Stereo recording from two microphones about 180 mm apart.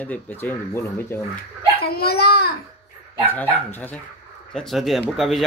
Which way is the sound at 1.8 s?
60° left (ahead or behind).